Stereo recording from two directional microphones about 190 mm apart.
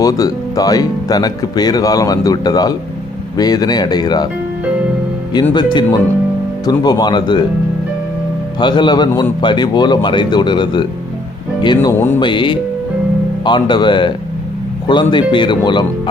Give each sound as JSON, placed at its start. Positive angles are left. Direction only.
{"t": 0.0, "sound": "speech", "side_deg": 20}
{"t": 5.3, "sound": "speech", "side_deg": 25}
{"t": 8.5, "sound": "speech", "side_deg": 25}
{"t": 12.2, "sound": "speech", "side_deg": 25}